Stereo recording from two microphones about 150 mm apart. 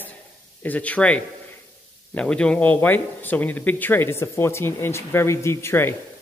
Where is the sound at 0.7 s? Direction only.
10° left (ahead or behind).